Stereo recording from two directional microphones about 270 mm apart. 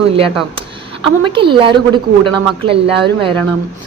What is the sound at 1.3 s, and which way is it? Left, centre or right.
Speech, centre.